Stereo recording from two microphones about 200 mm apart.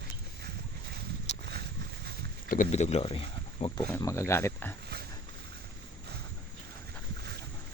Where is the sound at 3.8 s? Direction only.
15° left (ahead or behind).